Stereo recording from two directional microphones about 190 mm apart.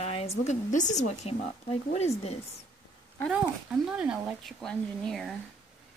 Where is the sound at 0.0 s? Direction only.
35° left (ahead or behind).